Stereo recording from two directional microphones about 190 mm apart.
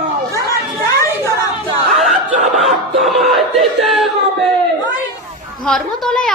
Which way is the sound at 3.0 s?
Centre (ahead or behind).